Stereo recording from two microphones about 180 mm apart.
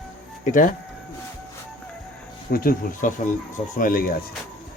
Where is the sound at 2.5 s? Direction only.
55° left (ahead or behind).